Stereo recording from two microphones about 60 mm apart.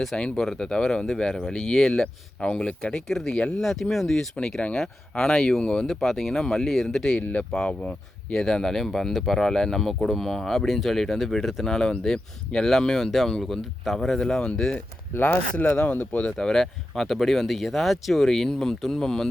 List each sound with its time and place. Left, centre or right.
0.2 s speech: centre
7.2 s speech: left
15.2 s speech: left; by 19.3 s centre